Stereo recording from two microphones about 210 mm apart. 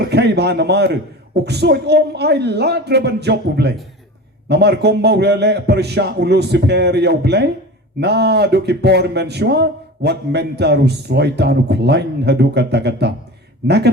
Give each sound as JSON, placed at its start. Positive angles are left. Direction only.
{"t": 0.0, "sound": "speech", "side_deg": -50}